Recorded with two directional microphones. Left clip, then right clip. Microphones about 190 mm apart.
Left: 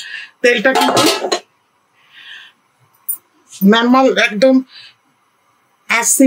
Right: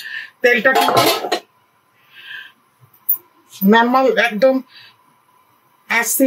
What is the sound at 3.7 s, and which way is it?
Speech, 50° left (ahead or behind).